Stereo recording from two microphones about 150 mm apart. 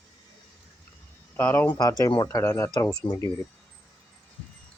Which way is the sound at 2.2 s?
15° left (ahead or behind).